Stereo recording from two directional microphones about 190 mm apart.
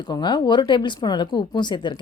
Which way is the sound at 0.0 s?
25° left (ahead or behind).